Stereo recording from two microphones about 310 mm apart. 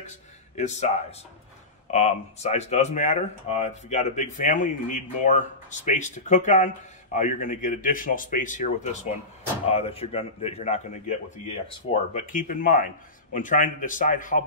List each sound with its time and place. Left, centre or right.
0.6 s speech: left